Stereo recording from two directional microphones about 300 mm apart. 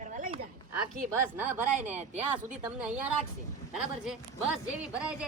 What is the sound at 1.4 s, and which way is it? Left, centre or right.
Speech, centre.